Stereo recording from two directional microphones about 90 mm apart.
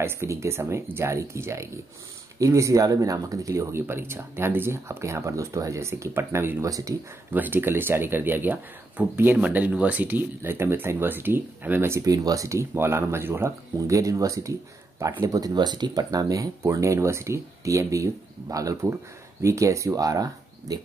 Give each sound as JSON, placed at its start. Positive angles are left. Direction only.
{"t": 0.0, "sound": "speech", "side_deg": -30}
{"t": 6.6, "sound": "speech", "side_deg": -40}
{"t": 7.3, "sound": "speech", "side_deg": -20}
{"t": 12.0, "sound": "speech", "side_deg": -40}